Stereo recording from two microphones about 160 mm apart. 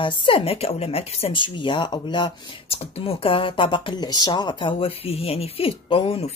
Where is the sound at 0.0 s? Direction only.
35° left (ahead or behind).